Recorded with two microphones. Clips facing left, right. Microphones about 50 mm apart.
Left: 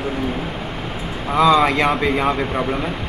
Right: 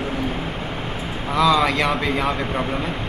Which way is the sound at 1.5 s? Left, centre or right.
Centre.